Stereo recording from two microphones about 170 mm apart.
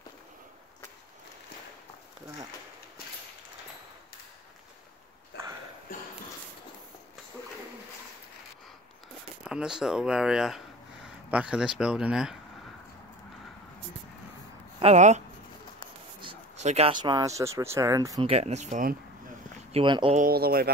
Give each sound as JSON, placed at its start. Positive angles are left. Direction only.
{"t": 5.3, "sound": "sniff", "side_deg": 85}
{"t": 9.4, "sound": "speech", "side_deg": -5}
{"t": 14.8, "sound": "speech", "side_deg": -40}
{"t": 16.5, "sound": "speech", "side_deg": -40}
{"t": 18.2, "sound": "speech", "side_deg": -40}
{"t": 19.7, "sound": "speech", "side_deg": -30}
{"t": 20.2, "sound": "speech", "side_deg": -60}